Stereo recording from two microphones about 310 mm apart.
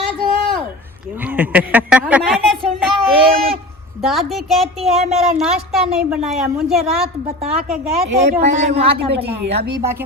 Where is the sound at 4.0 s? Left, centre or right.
Centre.